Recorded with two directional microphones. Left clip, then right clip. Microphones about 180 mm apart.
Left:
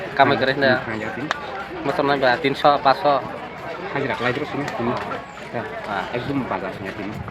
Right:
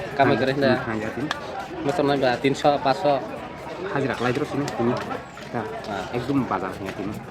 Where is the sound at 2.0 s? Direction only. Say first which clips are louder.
Left 3 dB; 15° right (ahead or behind).